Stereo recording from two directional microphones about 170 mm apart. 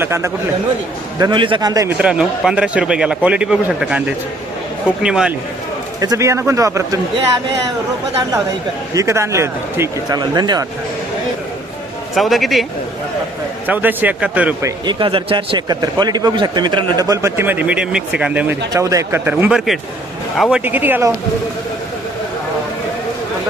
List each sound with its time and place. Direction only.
0.0 s speech: 15° right (ahead or behind)
1.2 s speech: 30° right (ahead or behind)
2.0 s speech: 5° right (ahead or behind)
6.0 s speech: 20° right (ahead or behind)
9.0 s speech: 15° right (ahead or behind)
12.1 s speech: centre (ahead or behind)
13.7 s speech: 10° right (ahead or behind)
14.8 s speech: 30° right (ahead or behind); by 18.5 s 5° right (ahead or behind)
18.7 s speech: 20° right (ahead or behind); by 20.6 s centre (ahead or behind)
20.7 s speech: 10° right (ahead or behind)